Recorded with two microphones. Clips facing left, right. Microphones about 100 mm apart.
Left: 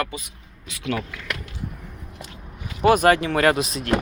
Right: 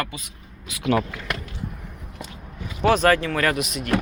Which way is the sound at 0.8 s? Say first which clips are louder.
Right 5 dB; 40° right (ahead or behind).